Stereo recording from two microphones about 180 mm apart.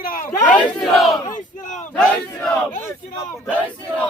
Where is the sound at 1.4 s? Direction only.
45° left (ahead or behind).